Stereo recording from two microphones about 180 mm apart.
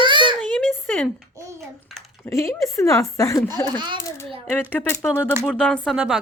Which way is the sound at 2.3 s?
15° left (ahead or behind).